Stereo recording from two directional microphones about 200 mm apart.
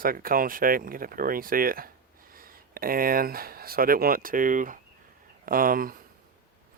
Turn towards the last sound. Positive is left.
turn(degrees=-45)  # may be behind; listen again after turning